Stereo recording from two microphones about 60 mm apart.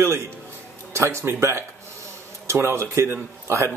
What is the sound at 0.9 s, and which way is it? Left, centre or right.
A man's voice, right.